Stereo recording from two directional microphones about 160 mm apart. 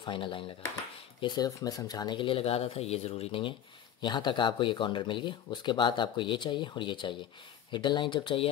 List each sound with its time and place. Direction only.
0.0 s speech: 30° left (ahead or behind)